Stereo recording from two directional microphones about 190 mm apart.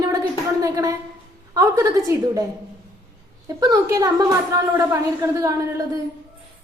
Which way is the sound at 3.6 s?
20° right (ahead or behind).